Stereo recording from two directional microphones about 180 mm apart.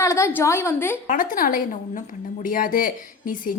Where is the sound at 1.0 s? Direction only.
50° left (ahead or behind).